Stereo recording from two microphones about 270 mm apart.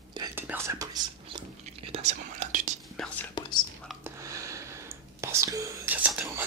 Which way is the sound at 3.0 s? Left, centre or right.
Centre.